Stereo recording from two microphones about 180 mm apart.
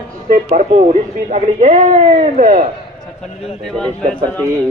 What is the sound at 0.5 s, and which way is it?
Speech, 45° right (ahead or behind).